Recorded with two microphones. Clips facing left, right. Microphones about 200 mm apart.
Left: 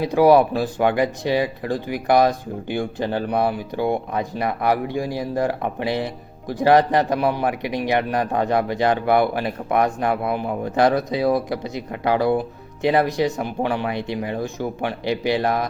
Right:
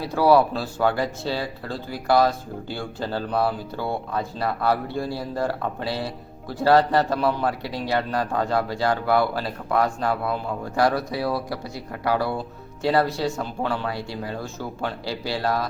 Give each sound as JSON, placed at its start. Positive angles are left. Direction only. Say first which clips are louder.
{"t": 0.0, "sound": "a man's voice", "louder": "left 4 dB", "side_deg": 15}